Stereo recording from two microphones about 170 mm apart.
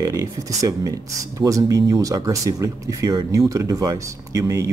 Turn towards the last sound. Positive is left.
turn(degrees=-15)  # may be behind; listen again after turning